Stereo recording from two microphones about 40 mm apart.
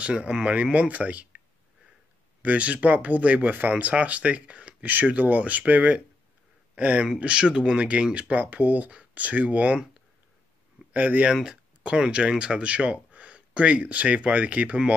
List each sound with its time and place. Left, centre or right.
0.0 s speech: right
2.4 s speech: right
4.8 s speech: right
8.4 s speech: right
10.9 s speech: right
11.8 s speech: right